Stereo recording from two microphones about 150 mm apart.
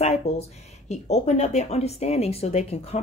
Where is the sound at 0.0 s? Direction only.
45° left (ahead or behind).